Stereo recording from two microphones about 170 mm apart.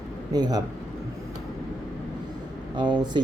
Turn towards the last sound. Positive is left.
turn(degrees=-25)  # may be behind; listen again after turning